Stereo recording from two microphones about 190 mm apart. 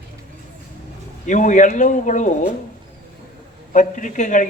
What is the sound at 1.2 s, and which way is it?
Speech, 40° left (ahead or behind).